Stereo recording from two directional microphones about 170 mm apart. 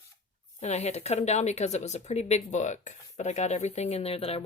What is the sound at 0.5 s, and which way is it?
Speech, 40° left (ahead or behind).